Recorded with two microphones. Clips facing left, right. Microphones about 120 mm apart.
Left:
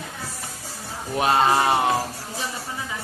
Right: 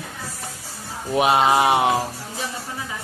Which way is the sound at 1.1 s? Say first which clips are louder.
Right 2 dB; 15° right (ahead or behind).